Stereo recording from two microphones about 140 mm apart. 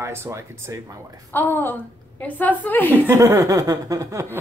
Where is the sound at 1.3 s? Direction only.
15° left (ahead or behind).